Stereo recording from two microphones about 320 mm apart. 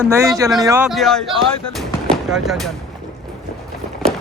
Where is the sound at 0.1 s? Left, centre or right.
Centre.